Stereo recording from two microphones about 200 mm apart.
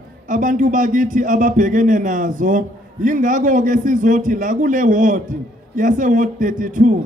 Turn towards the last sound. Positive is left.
turn(degrees=-40)  # may be behind; listen again after turning